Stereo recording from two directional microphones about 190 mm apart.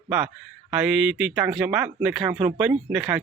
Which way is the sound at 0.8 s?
5° right (ahead or behind).